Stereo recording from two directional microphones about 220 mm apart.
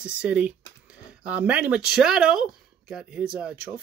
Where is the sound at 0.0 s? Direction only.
5° right (ahead or behind).